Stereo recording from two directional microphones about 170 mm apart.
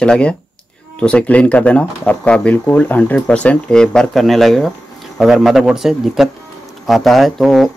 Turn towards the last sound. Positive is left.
turn(degrees=0)  # may be behind; listen again after turning